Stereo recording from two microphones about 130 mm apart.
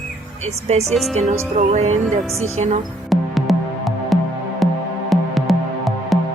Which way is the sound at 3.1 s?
Centre (ahead or behind).